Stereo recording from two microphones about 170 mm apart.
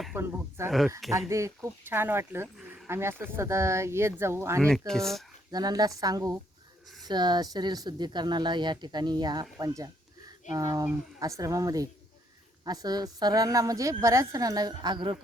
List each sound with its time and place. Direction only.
0.2 s speech: 15° right (ahead or behind)
2.6 s a sound: 5° right (ahead or behind)
3.3 s speech: 15° right (ahead or behind)
4.9 s speech: centre (ahead or behind)
5.5 s speech: 25° right (ahead or behind)